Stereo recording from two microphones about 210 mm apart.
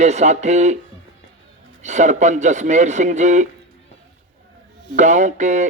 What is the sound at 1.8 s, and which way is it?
Speech, 35° right (ahead or behind).